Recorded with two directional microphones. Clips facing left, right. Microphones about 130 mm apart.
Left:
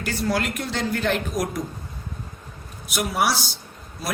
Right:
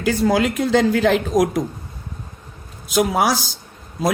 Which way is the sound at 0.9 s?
90° right.